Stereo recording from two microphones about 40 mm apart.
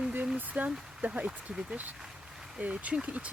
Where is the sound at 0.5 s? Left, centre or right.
Right.